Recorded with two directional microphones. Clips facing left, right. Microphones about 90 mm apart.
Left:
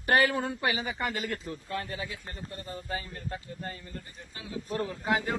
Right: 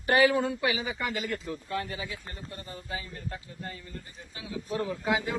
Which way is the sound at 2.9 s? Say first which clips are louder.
Left 1 dB; 40° left (ahead or behind).